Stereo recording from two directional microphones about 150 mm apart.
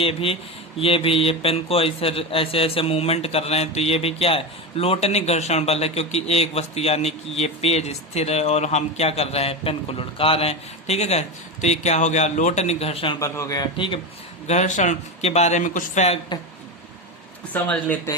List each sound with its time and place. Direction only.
0.0 s speech: 40° left (ahead or behind)
13.1 s a man's voice: 20° left (ahead or behind)
14.4 s speech: 50° left (ahead or behind)
16.3 s a man's voice: 30° left (ahead or behind)
17.5 s speech: 10° left (ahead or behind)